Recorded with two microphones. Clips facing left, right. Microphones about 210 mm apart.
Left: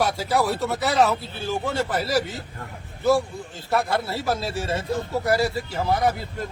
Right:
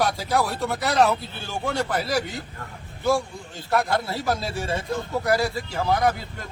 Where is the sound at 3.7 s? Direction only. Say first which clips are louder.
Even; centre (ahead or behind).